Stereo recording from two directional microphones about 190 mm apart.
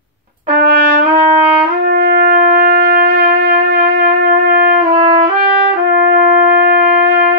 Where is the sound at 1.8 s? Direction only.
55° right (ahead or behind).